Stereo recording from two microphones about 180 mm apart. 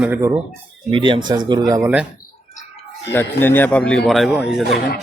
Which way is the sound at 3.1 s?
10° left (ahead or behind).